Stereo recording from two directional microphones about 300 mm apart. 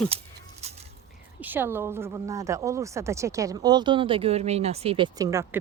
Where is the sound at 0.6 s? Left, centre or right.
Right.